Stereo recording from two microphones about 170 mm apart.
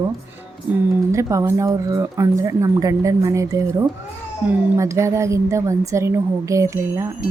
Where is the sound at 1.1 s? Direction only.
20° right (ahead or behind).